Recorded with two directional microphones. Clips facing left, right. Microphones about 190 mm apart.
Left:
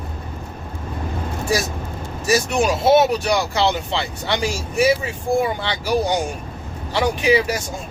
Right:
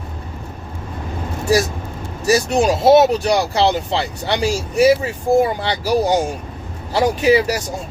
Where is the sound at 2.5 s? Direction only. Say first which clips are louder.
Right 4 dB; 35° right (ahead or behind).